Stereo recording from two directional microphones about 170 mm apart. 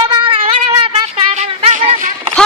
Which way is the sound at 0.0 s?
30° right (ahead or behind).